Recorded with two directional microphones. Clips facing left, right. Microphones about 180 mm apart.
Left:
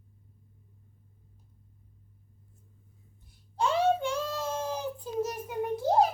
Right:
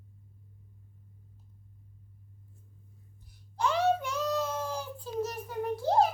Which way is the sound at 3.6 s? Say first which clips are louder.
Left 1 dB; 30° left (ahead or behind).